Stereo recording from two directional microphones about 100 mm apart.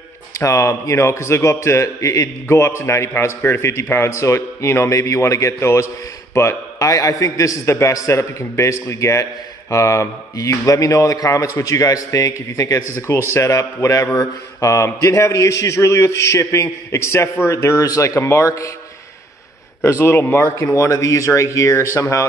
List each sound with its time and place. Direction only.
0.4 s a man's voice: 30° left (ahead or behind)
19.8 s a man's voice: 25° left (ahead or behind)